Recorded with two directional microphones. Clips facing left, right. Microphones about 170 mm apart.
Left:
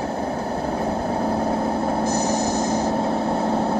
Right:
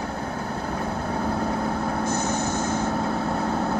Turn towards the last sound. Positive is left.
turn(degrees=25)  # may be behind; listen again after turning